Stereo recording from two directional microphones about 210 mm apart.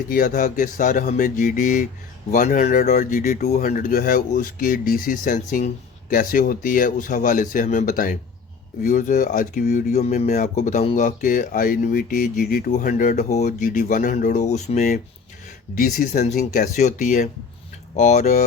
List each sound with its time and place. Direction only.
0.1 s speech: 40° left (ahead or behind)